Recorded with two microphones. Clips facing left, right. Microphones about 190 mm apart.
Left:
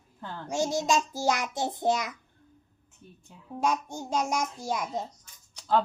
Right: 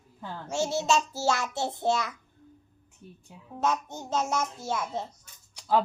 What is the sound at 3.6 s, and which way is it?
A child's voice, 10° left (ahead or behind).